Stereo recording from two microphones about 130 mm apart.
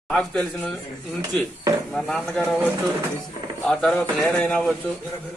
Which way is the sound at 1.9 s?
5° left (ahead or behind).